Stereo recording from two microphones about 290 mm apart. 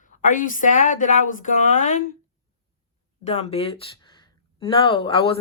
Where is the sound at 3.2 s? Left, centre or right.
Left.